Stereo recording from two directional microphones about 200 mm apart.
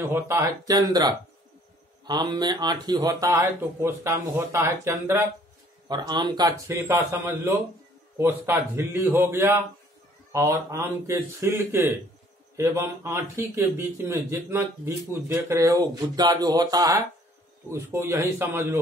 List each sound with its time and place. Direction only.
0.1 s a man's voice: 15° right (ahead or behind)